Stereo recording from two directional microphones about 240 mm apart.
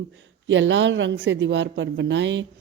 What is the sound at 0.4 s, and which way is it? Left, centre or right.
Speech, right.